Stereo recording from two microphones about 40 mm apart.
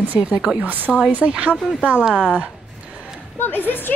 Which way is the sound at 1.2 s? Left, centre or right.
Right.